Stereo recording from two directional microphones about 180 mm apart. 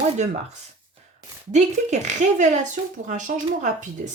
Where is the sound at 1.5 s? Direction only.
40° right (ahead or behind).